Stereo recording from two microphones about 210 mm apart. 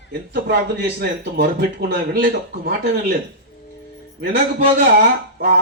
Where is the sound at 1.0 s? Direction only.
50° right (ahead or behind).